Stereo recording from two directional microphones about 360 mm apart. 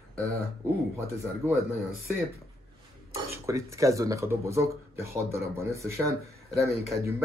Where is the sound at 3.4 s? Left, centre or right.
Centre.